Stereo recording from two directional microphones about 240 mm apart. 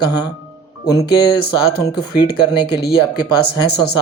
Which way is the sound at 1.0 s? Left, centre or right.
Left.